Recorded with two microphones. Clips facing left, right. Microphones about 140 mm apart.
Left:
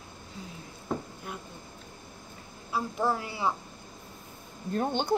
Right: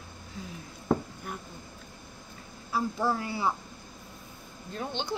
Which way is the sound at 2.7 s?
20° left (ahead or behind).